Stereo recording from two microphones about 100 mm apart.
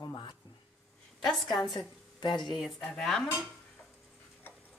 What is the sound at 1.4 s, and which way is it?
Speech, 45° left (ahead or behind).